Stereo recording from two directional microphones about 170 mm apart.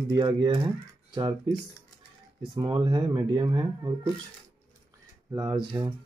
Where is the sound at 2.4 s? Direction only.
25° right (ahead or behind).